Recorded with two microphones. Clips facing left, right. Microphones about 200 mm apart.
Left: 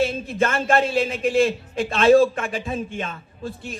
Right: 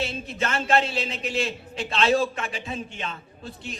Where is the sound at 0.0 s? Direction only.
50° left (ahead or behind).